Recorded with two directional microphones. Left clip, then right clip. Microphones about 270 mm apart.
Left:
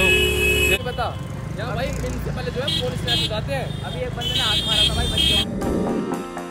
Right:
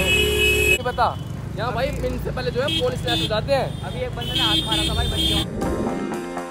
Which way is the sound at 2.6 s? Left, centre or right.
Centre.